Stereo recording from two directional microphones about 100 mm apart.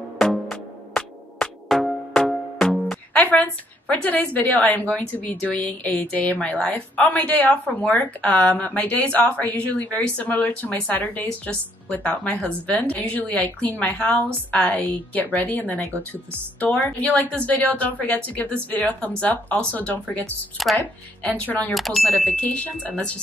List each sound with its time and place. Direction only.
0.2 s music: 5° left (ahead or behind)
1.8 s speech: centre (ahead or behind)
20.6 s speech: centre (ahead or behind)
21.3 s speech: 15° left (ahead or behind)
21.7 s speech: centre (ahead or behind)
22.3 s speech: 15° left (ahead or behind)